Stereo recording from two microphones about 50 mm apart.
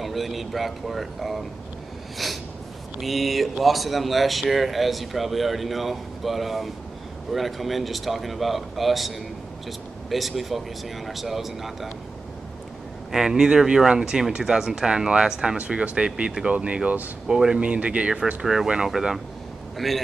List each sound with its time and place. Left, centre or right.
0.0 s speech: centre
2.2 s a sound: centre
3.0 s speech: centre
13.1 s speech: centre
15.5 s speech: right
17.3 s speech: centre
17.6 s speech: right
18.2 s speech: centre